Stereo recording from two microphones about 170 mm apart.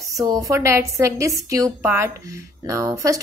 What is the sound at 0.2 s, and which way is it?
A woman's voice, 20° right (ahead or behind).